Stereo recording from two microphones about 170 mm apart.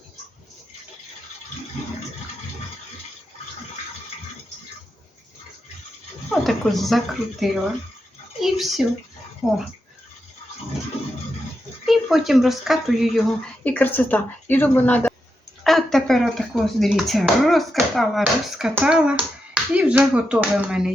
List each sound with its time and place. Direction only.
6.3 s speech: centre (ahead or behind)
8.4 s a sound: centre (ahead or behind)
9.4 s speech: centre (ahead or behind)
11.9 s speech: centre (ahead or behind)
13.7 s a woman's voice: 10° left (ahead or behind)